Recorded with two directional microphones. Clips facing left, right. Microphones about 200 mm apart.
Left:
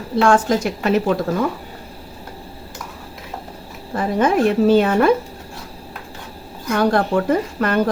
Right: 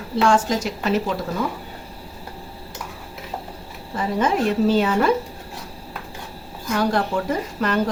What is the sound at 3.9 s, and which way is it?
A woman's voice, 55° left (ahead or behind).